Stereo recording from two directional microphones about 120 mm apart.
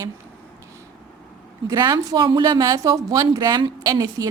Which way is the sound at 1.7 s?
30° right (ahead or behind).